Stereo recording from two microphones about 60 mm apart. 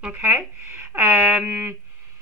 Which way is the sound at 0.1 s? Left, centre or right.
Right.